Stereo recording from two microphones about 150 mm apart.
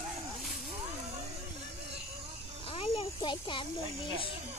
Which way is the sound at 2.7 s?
40° left (ahead or behind).